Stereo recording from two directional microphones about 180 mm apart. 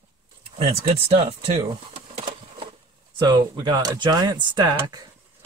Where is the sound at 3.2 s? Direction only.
20° right (ahead or behind).